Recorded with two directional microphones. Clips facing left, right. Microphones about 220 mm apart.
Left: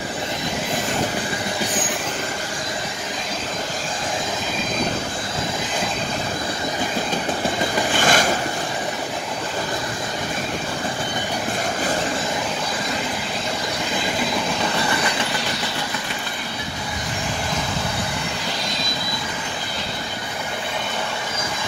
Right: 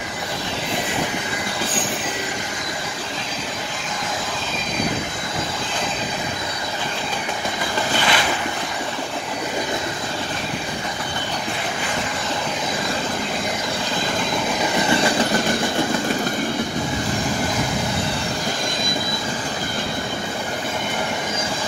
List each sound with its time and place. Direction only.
8.0 s vehicle: 45° left (ahead or behind)